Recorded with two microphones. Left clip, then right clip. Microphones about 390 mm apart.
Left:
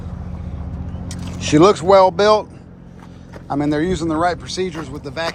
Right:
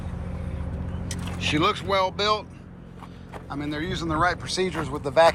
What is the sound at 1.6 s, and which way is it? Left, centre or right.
Speech, centre.